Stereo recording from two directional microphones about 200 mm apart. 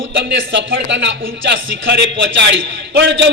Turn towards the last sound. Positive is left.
turn(degrees=-60)  # may be behind; listen again after turning